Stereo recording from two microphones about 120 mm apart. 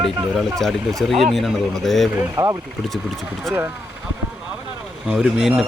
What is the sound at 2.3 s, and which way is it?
Speech, 30° right (ahead or behind).